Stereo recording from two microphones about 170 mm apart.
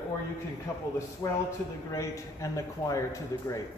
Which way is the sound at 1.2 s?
15° left (ahead or behind).